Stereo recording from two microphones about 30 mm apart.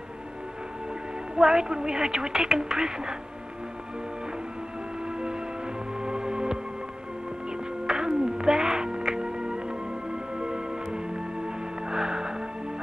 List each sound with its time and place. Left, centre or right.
1.3 s a woman's voice: right
5.0 s music: right